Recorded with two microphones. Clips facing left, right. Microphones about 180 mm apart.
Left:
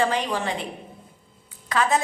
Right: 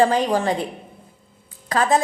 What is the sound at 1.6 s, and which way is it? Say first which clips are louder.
Speech: right 4 dB; 35° right (ahead or behind).